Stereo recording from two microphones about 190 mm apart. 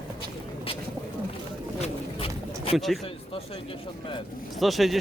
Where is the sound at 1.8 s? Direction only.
30° left (ahead or behind).